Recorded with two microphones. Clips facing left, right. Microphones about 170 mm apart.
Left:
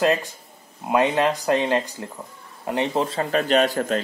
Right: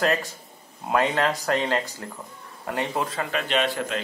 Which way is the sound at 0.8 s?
20° left (ahead or behind).